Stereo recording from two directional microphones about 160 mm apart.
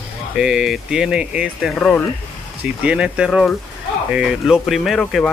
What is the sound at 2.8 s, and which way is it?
Speech, 5° right (ahead or behind).